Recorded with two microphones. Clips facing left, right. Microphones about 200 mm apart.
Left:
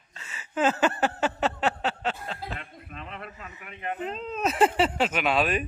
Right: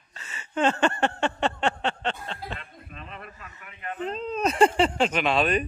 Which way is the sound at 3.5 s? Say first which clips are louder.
Left 3 dB; 20° left (ahead or behind).